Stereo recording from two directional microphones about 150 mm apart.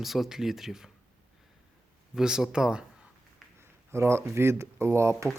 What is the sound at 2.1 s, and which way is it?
Speech, 5° right (ahead or behind).